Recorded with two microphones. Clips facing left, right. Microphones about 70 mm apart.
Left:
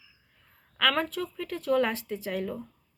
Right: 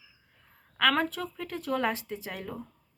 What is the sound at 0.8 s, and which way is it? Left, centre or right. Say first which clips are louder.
Speech: right 1 dB; right.